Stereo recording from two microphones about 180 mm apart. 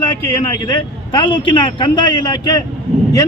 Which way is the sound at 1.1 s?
25° left (ahead or behind).